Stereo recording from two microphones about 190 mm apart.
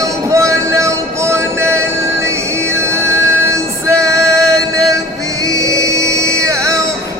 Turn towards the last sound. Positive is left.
turn(degrees=-15)  # may be behind; listen again after turning